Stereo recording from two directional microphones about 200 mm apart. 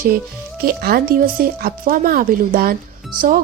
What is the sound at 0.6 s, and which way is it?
Speech, 50° right (ahead or behind).